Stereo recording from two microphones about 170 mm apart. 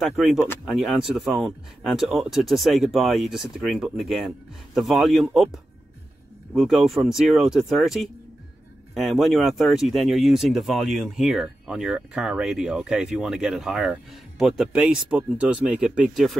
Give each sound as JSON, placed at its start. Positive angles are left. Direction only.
{"t": 0.0, "sound": "speech", "side_deg": 0}
{"t": 6.5, "sound": "speech", "side_deg": 0}